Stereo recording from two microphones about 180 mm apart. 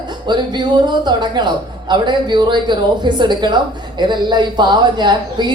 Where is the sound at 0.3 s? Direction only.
25° right (ahead or behind).